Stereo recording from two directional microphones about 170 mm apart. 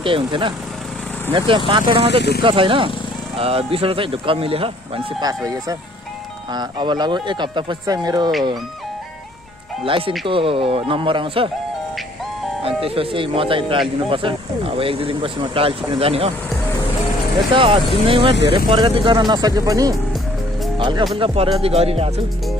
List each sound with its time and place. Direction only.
0.0 s speech: 30° right (ahead or behind)
1.7 s speech: 30° right (ahead or behind)
2.0 s speech: 80° left
2.4 s speech: 30° right (ahead or behind)
5.2 s speech: 20° right (ahead or behind)
9.8 s speech: 30° right (ahead or behind)
12.6 s speech: 35° right (ahead or behind)
17.5 s speech: 30° right (ahead or behind)